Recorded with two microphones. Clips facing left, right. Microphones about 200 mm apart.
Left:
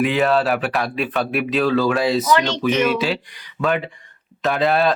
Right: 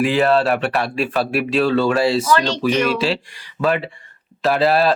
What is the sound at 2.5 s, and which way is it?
Speech, 10° right (ahead or behind).